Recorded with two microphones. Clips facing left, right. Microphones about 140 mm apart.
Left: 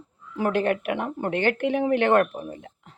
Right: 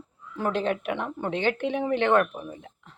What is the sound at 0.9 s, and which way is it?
Speech, 55° left (ahead or behind).